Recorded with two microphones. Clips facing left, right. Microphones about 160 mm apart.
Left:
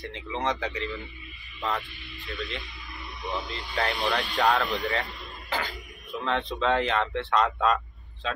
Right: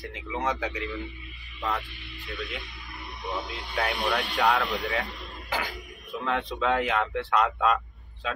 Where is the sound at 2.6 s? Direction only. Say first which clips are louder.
Even; 55° right (ahead or behind).